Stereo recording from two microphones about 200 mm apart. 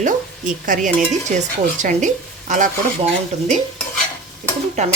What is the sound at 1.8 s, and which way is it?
Speech, 40° right (ahead or behind).